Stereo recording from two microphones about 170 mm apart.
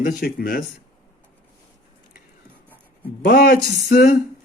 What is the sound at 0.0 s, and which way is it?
Speech, 65° left (ahead or behind).